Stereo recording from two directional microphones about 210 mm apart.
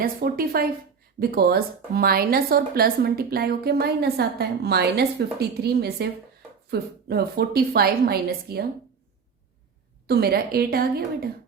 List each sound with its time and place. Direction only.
0.0 s a woman's voice: 45° right (ahead or behind)
10.1 s a woman's voice: 45° right (ahead or behind)